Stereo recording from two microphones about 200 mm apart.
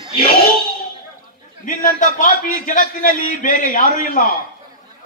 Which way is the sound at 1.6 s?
40° left (ahead or behind).